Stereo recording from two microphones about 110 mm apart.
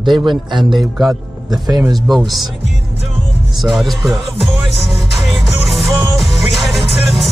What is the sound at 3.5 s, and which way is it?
Speech, centre (ahead or behind).